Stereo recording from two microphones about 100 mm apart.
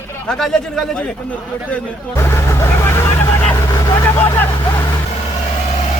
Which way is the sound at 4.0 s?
25° left (ahead or behind).